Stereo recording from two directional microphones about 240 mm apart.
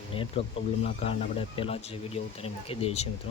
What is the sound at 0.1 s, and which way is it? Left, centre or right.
Speech, left.